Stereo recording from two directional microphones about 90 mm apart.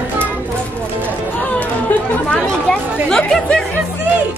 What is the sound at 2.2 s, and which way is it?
Speech, 10° left (ahead or behind).